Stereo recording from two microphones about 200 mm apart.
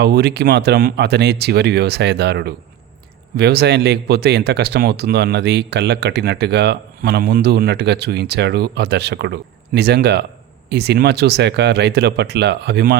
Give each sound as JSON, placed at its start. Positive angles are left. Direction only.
{"t": 0.0, "sound": "speech", "side_deg": -55}